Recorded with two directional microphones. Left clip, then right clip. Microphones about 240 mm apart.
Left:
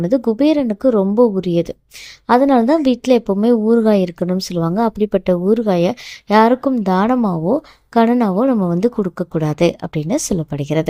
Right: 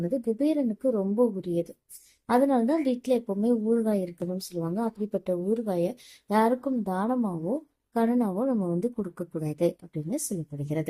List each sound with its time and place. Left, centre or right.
0.2 s a woman's voice: left